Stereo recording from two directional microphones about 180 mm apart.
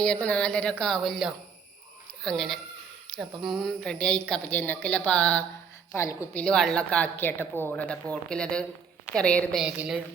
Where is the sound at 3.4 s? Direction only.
Centre (ahead or behind).